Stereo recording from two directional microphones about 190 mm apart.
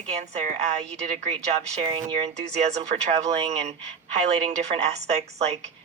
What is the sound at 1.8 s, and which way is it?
Speech, 30° right (ahead or behind).